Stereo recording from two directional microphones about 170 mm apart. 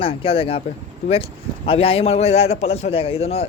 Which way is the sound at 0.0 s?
35° left (ahead or behind).